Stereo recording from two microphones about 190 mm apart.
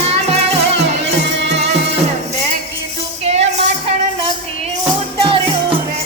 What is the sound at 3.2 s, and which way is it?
Music, 35° right (ahead or behind).